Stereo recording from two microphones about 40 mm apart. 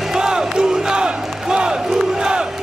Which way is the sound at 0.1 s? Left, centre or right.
Centre.